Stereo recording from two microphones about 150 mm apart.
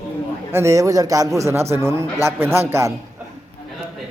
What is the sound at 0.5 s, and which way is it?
A man's voice, 20° right (ahead or behind).